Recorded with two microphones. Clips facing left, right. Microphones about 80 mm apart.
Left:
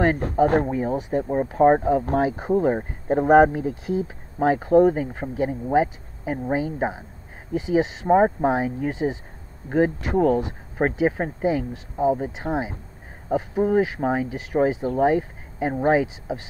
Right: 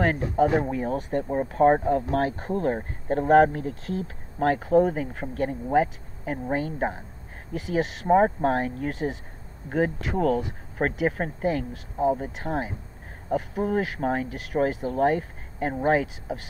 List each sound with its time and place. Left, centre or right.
0.2 s speech: left
0.7 s speech: centre